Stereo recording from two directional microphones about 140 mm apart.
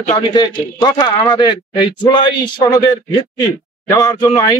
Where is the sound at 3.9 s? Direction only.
25° left (ahead or behind).